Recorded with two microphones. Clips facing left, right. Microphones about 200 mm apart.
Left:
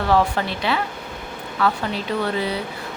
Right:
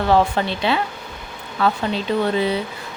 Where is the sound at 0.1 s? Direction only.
25° right (ahead or behind).